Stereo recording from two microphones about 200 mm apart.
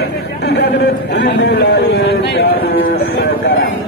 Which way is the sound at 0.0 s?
55° left (ahead or behind).